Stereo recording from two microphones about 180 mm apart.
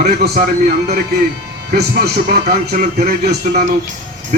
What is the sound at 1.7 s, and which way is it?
Speech, 60° right (ahead or behind).